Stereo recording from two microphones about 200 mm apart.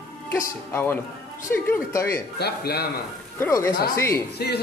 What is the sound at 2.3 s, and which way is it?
Speech, 55° left (ahead or behind).